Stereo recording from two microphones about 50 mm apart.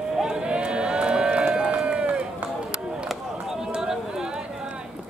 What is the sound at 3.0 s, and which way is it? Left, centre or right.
Chop, centre.